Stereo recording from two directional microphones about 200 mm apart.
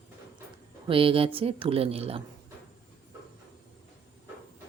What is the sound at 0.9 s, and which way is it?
Speech, 25° right (ahead or behind).